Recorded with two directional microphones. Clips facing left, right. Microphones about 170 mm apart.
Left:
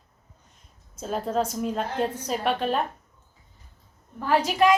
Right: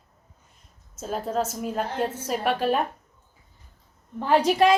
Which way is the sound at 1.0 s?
Centre (ahead or behind).